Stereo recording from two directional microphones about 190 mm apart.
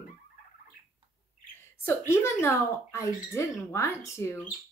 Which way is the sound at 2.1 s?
15° left (ahead or behind).